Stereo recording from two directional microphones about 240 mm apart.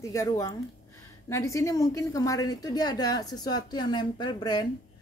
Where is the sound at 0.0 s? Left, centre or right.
Centre.